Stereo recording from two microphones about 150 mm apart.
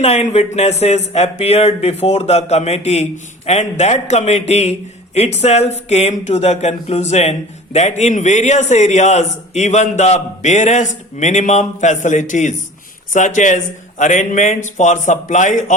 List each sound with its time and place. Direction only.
0.0 s a man's voice: 45° left (ahead or behind)